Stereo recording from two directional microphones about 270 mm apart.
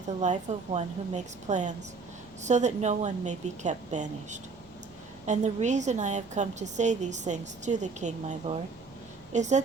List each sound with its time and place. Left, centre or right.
0.2 s a woman's voice: right